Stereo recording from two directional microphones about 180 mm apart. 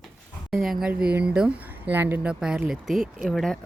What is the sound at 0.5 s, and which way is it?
Speech, centre (ahead or behind).